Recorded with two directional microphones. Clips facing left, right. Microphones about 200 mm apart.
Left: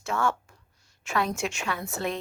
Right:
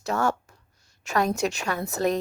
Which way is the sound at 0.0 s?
40° right (ahead or behind).